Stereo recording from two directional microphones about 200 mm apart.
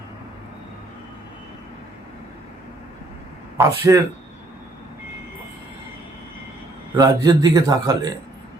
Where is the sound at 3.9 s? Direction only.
15° right (ahead or behind).